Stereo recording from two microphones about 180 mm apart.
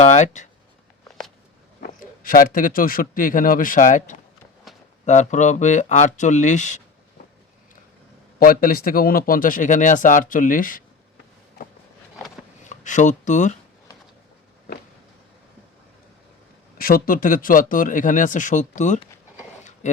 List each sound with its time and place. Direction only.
0.0 s speech: 40° left (ahead or behind)
1.8 s speech: 50° left (ahead or behind)
4.7 s a sound: centre (ahead or behind)
5.0 s speech: 40° left (ahead or behind)
8.4 s speech: 55° left (ahead or behind)
12.6 s speech: 45° left (ahead or behind)
16.7 s speech: 55° left (ahead or behind)
19.8 s a sound: 40° left (ahead or behind)